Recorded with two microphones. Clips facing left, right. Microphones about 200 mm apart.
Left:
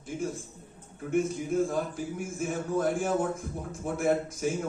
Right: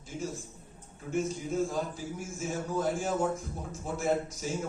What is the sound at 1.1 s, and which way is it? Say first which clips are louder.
A man's voice: left 4 dB; 55° left (ahead or behind).